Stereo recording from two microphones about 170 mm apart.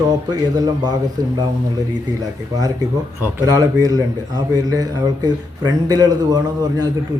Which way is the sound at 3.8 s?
20° right (ahead or behind).